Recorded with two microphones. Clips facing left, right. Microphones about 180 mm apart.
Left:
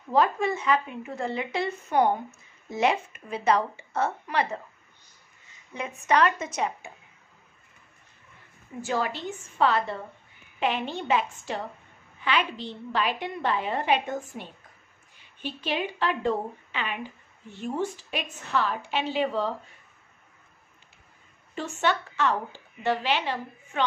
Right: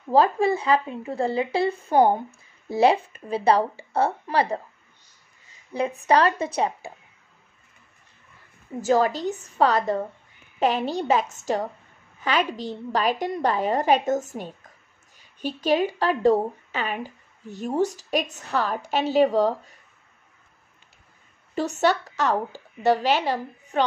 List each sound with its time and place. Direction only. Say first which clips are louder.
0.1 s a woman's voice: right 4 dB; 35° right (ahead or behind)
5.7 s a woman's voice: right 5 dB; 35° right (ahead or behind)
8.8 s a woman's voice: right 8 dB; 40° right (ahead or behind)
21.5 s a woman's voice: right 5 dB; 40° right (ahead or behind)